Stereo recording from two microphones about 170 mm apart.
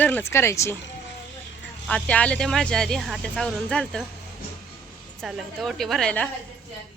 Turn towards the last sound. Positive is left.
turn(degrees=5)  # may be behind; listen again after turning